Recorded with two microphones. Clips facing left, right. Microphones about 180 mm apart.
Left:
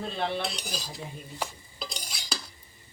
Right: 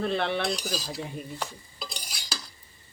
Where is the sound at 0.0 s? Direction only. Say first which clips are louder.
Right 4 dB; 70° right (ahead or behind).